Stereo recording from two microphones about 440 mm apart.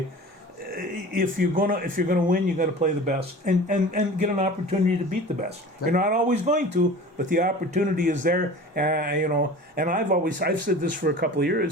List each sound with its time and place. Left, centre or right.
0.7 s speech: centre